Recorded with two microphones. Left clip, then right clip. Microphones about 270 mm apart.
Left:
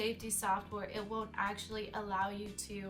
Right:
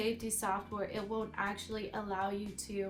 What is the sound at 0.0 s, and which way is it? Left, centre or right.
A woman's voice, centre.